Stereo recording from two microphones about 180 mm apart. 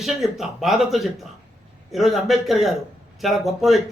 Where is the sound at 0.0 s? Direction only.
Centre (ahead or behind).